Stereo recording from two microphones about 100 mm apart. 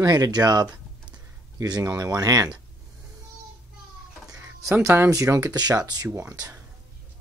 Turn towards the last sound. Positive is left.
turn(degrees=-35)  # may be behind; listen again after turning